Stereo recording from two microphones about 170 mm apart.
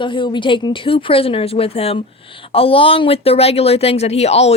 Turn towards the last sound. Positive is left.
turn(degrees=40)  # may be behind; listen again after turning